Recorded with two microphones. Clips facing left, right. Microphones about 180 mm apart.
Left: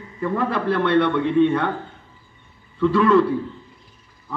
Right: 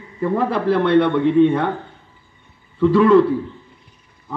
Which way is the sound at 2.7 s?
15° right (ahead or behind).